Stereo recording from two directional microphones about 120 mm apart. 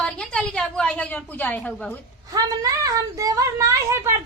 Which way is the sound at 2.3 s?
30° right (ahead or behind).